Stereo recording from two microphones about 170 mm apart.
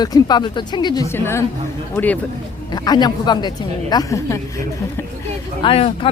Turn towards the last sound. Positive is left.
turn(degrees=35)  # may be behind; listen again after turning